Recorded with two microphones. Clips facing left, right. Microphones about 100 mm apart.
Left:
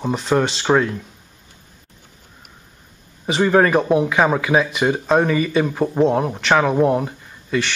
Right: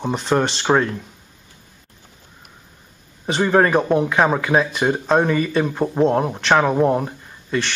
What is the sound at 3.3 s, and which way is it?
Speech, centre (ahead or behind).